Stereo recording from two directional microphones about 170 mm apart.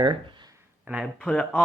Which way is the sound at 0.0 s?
30° right (ahead or behind).